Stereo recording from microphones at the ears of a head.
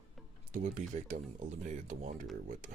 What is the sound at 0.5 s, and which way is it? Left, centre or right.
A man's voice, right.